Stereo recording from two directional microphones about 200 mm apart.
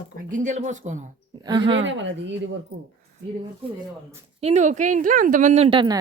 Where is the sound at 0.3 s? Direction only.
40° right (ahead or behind).